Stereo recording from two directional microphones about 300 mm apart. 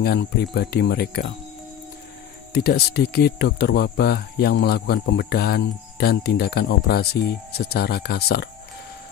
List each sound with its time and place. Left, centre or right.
0.0 s speech: left
2.5 s speech: left